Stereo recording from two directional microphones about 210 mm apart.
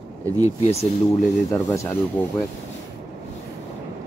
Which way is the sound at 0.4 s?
30° left (ahead or behind).